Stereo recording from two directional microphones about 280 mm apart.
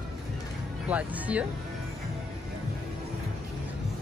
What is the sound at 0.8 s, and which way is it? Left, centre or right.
Speech, centre.